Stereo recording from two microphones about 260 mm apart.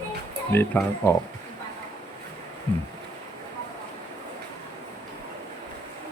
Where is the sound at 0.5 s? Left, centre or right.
Centre.